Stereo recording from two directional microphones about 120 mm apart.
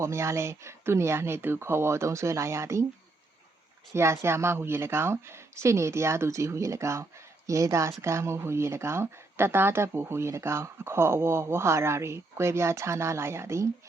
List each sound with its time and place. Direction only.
0.0 s speech: 25° right (ahead or behind)
3.9 s speech: 20° right (ahead or behind)